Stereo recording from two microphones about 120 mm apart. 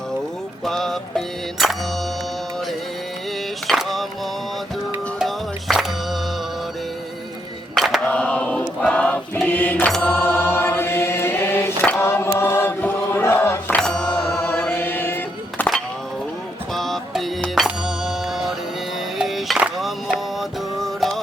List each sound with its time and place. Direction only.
0.6 s music: 5° left (ahead or behind)
3.7 s music: centre (ahead or behind)
5.2 s music: centre (ahead or behind)
7.8 s a sound: centre (ahead or behind)
8.0 s choir: 10° left (ahead or behind)
9.9 s mantra: 15° left (ahead or behind)
12.4 s chant: 20° left (ahead or behind)
14.2 s music: 20° left (ahead or behind)
16.7 s music: centre (ahead or behind)